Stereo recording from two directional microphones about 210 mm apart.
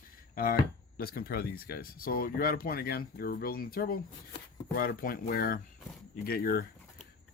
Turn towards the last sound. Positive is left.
turn(degrees=45)  # may be behind; listen again after turning